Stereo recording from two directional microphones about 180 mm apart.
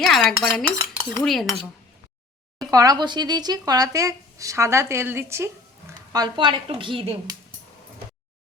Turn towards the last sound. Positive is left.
turn(degrees=-25)  # may be behind; listen again after turning